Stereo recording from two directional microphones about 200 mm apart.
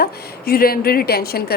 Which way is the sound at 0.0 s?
50° left (ahead or behind).